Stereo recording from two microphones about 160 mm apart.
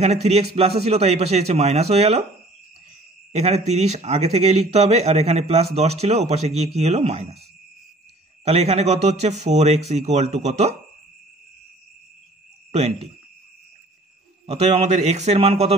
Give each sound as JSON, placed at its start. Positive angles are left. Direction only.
{"t": 0.0, "sound": "a man's voice", "side_deg": -40}
{"t": 3.3, "sound": "a man's voice", "side_deg": -40}
{"t": 8.5, "sound": "speech", "side_deg": -40}
{"t": 12.7, "sound": "a man's voice", "side_deg": -40}
{"t": 14.4, "sound": "speech", "side_deg": -40}